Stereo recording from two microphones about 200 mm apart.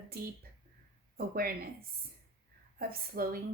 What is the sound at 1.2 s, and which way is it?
Speech, 50° right (ahead or behind).